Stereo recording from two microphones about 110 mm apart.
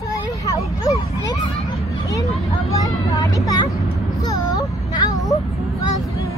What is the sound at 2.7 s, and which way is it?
Vehicle, 35° left (ahead or behind).